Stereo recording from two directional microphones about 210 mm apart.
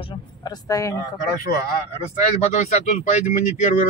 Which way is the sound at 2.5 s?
35° left (ahead or behind).